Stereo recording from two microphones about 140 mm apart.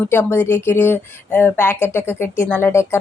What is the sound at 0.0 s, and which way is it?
Speech, 15° left (ahead or behind).